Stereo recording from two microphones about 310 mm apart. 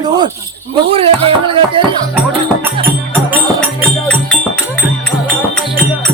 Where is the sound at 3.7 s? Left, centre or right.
Centre.